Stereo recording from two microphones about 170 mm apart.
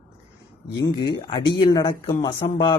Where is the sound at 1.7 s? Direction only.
20° left (ahead or behind).